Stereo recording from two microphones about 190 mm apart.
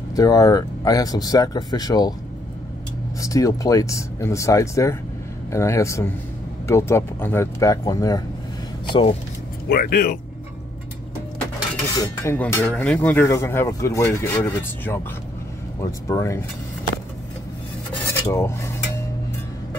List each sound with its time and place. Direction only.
0.1 s speech: 20° left (ahead or behind)
3.2 s speech: 15° left (ahead or behind)
9.7 s speech: 55° left (ahead or behind)
12.2 s speech: 10° left (ahead or behind)
18.2 s speech: 15° left (ahead or behind)